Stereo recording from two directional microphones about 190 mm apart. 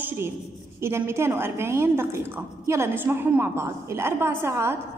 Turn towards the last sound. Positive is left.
turn(degrees=-15)  # may be behind; listen again after turning